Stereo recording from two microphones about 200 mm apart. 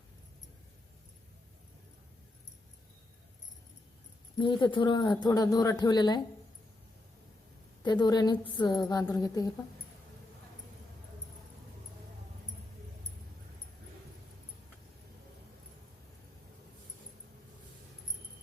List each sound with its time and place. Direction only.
4.4 s speech: 25° left (ahead or behind)
7.9 s a woman's voice: 20° left (ahead or behind)